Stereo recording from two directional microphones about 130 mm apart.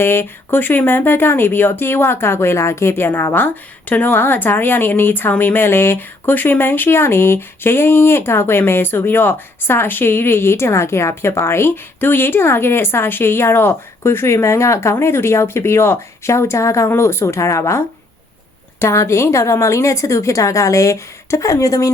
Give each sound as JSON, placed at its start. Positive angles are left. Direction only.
{"t": 0.0, "sound": "a woman's voice", "side_deg": 15}